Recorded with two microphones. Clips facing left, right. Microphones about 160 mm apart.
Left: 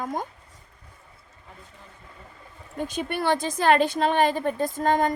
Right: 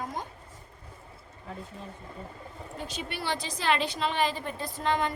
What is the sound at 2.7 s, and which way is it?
A woman's voice, 50° left (ahead or behind).